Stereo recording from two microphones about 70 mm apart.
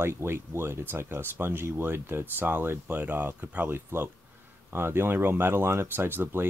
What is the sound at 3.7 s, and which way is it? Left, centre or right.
Speech, right.